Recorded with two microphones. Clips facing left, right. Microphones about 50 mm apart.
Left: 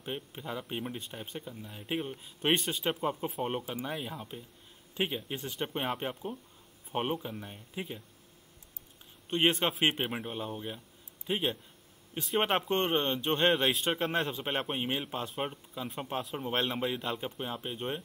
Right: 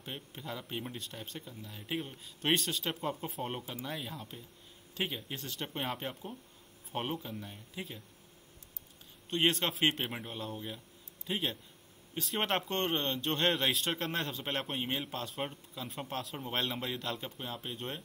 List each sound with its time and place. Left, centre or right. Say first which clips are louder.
0.0 s speech: left 5 dB; centre
9.3 s speech: left 3 dB; centre